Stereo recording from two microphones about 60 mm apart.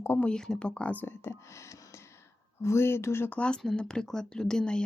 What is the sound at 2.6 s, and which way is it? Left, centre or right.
Speech, left.